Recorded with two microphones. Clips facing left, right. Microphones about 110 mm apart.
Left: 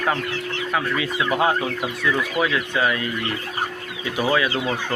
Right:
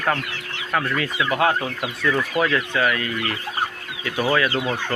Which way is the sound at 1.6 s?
5° left (ahead or behind).